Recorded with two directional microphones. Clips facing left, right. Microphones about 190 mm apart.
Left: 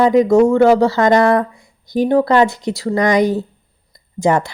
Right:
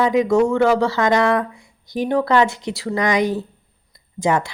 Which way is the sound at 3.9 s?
45° left (ahead or behind).